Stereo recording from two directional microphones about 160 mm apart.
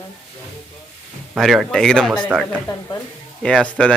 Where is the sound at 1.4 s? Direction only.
Centre (ahead or behind).